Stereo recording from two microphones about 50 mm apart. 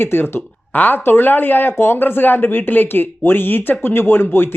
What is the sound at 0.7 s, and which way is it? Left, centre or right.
Speech, left.